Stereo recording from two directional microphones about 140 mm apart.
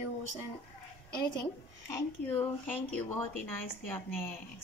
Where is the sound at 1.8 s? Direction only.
15° left (ahead or behind).